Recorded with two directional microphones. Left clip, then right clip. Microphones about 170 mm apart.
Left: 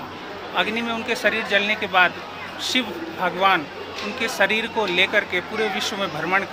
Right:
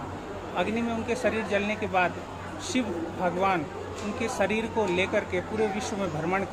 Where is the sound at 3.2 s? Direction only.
5° left (ahead or behind).